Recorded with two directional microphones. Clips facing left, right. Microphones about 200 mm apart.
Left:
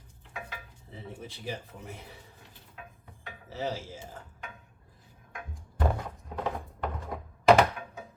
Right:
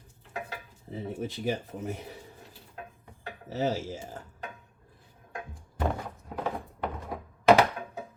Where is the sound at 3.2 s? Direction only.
40° right (ahead or behind).